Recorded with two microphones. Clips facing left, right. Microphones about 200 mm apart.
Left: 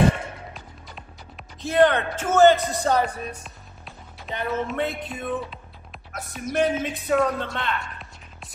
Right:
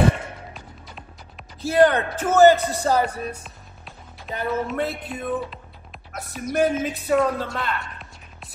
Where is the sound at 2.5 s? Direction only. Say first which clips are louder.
Right 1 dB; 5° right (ahead or behind).